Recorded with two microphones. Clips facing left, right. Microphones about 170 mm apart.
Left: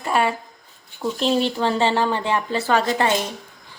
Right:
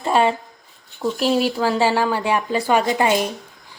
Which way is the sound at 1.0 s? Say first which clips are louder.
Right 2 dB; 5° right (ahead or behind).